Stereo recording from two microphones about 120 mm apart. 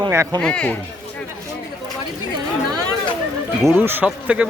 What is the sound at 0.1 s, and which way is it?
Speech, 25° right (ahead or behind).